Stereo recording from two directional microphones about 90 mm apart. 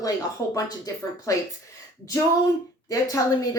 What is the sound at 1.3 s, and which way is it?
Speech, 40° left (ahead or behind).